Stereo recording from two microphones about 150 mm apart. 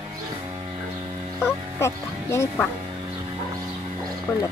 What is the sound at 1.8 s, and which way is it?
Music, 20° left (ahead or behind).